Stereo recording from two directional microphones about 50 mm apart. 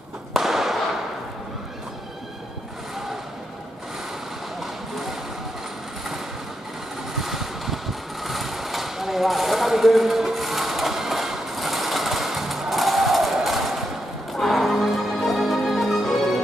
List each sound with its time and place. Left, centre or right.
0.3 s firecracker: centre
7.2 s vehicle: centre
14.3 s music: centre